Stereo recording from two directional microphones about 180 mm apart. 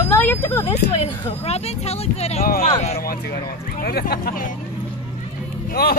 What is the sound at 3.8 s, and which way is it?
Speech, 55° left (ahead or behind).